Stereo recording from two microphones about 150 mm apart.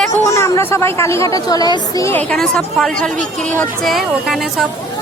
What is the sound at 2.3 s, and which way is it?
Speech, 5° left (ahead or behind).